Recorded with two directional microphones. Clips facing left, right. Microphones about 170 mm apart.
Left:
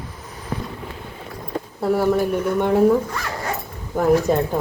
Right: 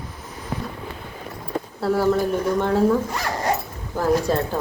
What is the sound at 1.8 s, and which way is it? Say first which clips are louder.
A woman's voice: left 1 dB; 15° left (ahead or behind).